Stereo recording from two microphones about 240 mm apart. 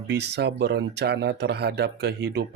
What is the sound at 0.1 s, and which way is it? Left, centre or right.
Speech, right.